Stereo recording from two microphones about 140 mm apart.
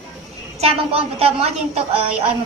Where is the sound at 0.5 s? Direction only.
45° right (ahead or behind).